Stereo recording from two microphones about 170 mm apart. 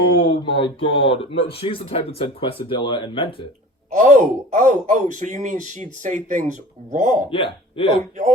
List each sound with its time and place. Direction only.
0.2 s speech: 30° left (ahead or behind)
3.9 s speech: 45° right (ahead or behind)
7.8 s speech: 30° left (ahead or behind)